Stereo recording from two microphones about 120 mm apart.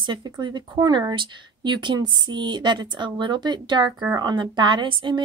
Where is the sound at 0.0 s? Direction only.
40° right (ahead or behind).